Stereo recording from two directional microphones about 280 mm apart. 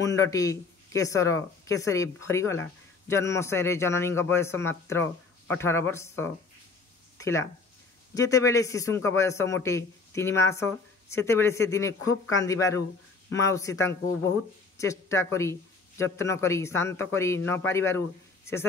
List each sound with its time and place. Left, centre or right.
0.0 s speech: centre